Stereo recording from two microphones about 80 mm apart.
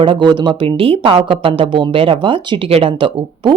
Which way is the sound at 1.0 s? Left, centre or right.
Right.